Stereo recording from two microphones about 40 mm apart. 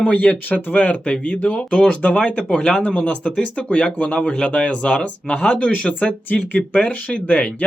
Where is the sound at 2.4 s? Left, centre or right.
Centre; by 7.2 s left.